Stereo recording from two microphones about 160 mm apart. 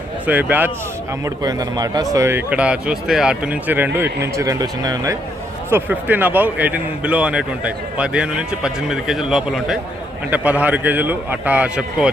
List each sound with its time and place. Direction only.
0.3 s a man's voice: 10° right (ahead or behind)
1.2 s a man's voice: 25° right (ahead or behind)
5.7 s a man's voice: 10° right (ahead or behind)